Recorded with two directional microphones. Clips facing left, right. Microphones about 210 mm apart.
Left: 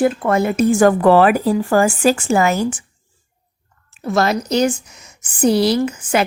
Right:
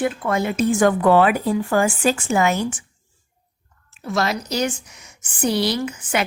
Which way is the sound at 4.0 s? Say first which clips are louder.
Left 5 dB; 45° left (ahead or behind).